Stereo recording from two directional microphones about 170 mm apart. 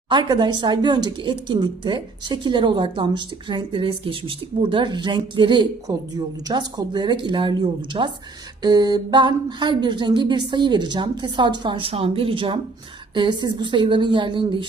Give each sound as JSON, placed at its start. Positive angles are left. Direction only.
{"t": 0.1, "sound": "a woman's voice", "side_deg": -25}